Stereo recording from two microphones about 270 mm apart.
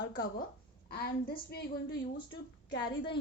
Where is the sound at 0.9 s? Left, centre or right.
Left.